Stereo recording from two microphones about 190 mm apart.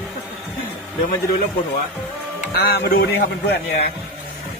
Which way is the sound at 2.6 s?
55° left (ahead or behind).